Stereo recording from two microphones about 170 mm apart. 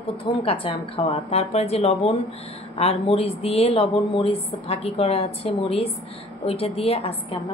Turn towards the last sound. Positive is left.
turn(degrees=35)  # may be behind; listen again after turning